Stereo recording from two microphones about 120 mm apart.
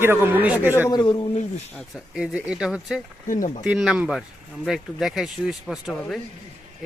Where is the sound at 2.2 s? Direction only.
10° right (ahead or behind).